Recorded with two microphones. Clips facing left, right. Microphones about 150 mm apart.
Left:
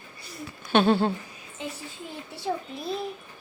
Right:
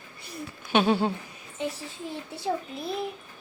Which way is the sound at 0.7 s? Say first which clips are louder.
Left 2 dB; 10° right (ahead or behind).